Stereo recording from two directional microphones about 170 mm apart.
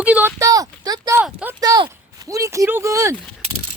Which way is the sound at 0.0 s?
10° right (ahead or behind).